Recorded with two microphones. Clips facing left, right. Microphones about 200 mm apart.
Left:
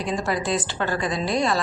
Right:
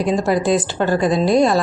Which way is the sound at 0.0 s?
45° right (ahead or behind).